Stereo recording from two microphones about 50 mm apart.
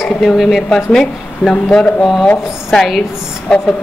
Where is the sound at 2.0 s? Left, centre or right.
Centre.